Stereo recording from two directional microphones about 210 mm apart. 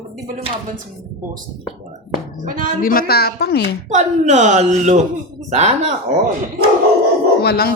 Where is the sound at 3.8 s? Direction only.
35° right (ahead or behind).